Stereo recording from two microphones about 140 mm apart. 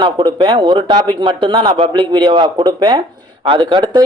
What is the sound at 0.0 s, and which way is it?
Speech, 35° right (ahead or behind).